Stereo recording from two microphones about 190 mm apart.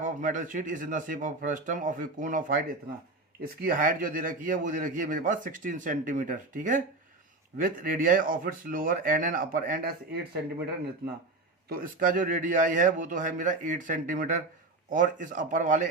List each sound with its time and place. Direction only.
0.0 s a man's voice: 45° right (ahead or behind)
3.6 s a man's voice: 50° right (ahead or behind)
11.7 s a man's voice: 45° right (ahead or behind)